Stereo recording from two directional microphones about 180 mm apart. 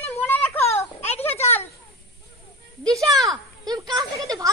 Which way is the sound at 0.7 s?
35° left (ahead or behind).